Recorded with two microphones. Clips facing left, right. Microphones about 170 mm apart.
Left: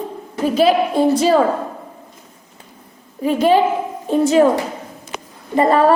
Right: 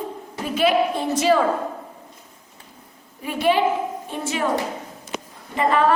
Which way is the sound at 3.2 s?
40° left (ahead or behind).